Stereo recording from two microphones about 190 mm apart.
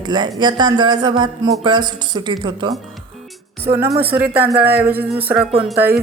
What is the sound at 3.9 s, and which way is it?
A woman's voice, 10° right (ahead or behind).